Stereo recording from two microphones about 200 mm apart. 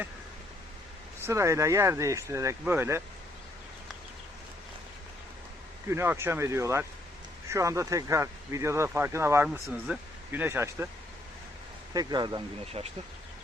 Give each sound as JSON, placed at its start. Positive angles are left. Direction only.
{"t": 1.2, "sound": "speech", "side_deg": -15}
{"t": 5.9, "sound": "speech", "side_deg": -10}
{"t": 11.9, "sound": "speech", "side_deg": -20}